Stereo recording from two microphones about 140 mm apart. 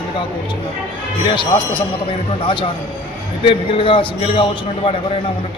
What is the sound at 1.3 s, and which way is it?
A man's voice, 35° left (ahead or behind).